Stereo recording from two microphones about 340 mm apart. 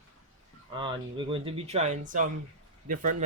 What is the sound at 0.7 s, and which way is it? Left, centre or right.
Speech, centre.